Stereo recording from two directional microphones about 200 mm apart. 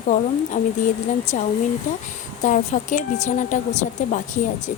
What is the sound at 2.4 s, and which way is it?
A woman's voice, 40° left (ahead or behind).